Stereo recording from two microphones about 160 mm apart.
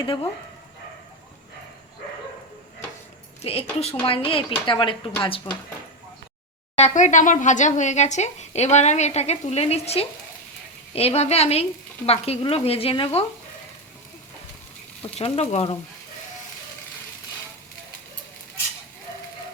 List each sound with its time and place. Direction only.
0.0 s speech: 35° left (ahead or behind)
3.4 s speech: 40° left (ahead or behind)
6.7 s speech: 45° left (ahead or behind)
15.0 s speech: 40° left (ahead or behind)